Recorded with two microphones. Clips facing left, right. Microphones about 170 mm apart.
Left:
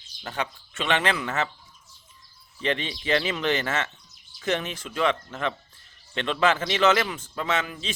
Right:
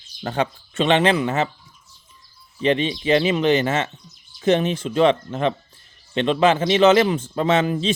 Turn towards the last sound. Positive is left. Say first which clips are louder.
# right 10 dB
turn(degrees=-30)  # may be behind; listen again after turning